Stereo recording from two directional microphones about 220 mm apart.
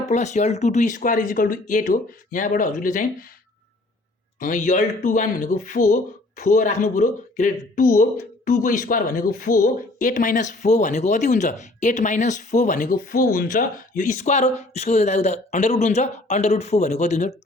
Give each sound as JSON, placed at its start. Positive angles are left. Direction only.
{"t": 0.1, "sound": "speech", "side_deg": 30}
{"t": 4.4, "sound": "speech", "side_deg": 35}